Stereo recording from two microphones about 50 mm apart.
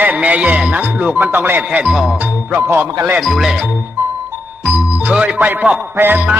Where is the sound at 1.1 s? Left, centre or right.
Right.